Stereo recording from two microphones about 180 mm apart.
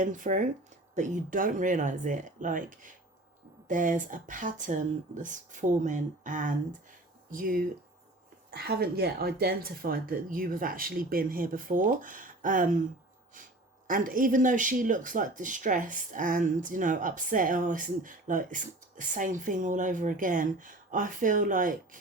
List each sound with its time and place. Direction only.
0.0 s speech: 45° right (ahead or behind)